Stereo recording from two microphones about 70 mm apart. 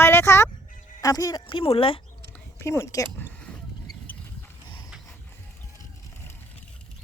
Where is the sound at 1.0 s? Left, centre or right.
Left.